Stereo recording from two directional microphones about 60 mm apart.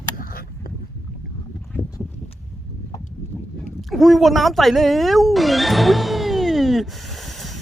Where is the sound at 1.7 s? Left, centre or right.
Left.